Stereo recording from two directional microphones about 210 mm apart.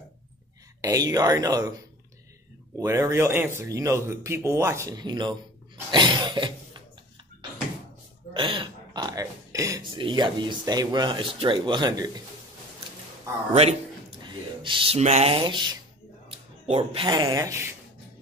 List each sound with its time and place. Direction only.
0.7 s speech: 15° right (ahead or behind)
2.8 s speech: 15° right (ahead or behind)
8.3 s speech: 25° right (ahead or behind)
13.5 s speech: 30° right (ahead or behind); by 17.7 s 15° right (ahead or behind)